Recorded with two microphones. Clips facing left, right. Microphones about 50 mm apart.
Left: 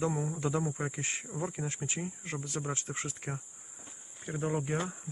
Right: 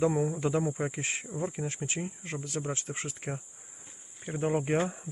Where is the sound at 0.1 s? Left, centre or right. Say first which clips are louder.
Right 4 dB; centre.